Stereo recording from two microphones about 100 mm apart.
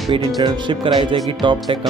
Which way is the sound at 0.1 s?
50° right (ahead or behind).